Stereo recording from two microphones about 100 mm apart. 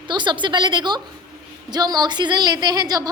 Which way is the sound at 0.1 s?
50° right (ahead or behind).